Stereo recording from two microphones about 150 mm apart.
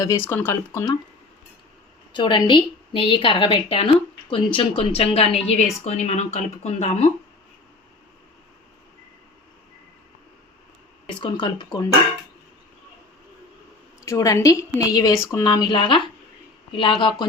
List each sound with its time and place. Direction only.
0.0 s speech: 20° left (ahead or behind)
2.1 s a woman's voice: 30° left (ahead or behind)
11.1 s a woman's voice: 35° left (ahead or behind)
14.0 s a woman's voice: 20° left (ahead or behind)